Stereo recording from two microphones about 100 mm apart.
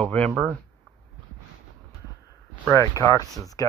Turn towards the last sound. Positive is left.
turn(degrees=35)  # may be behind; listen again after turning